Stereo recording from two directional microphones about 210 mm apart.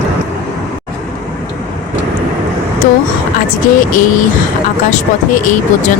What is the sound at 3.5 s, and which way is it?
Speech, 40° left (ahead or behind).